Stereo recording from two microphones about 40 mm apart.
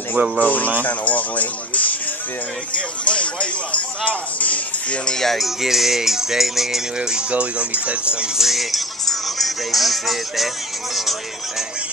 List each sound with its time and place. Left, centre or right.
0.4 s speech: left
3.1 s speech: left
5.1 s music: centre
5.4 s music: centre
7.0 s speech: right
7.2 s speech: right
8.4 s speech: centre
9.0 s music: centre